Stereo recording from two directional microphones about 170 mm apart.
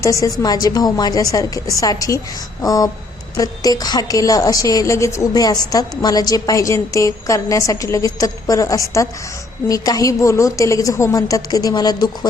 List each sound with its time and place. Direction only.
0.0 s a woman's voice: 20° left (ahead or behind)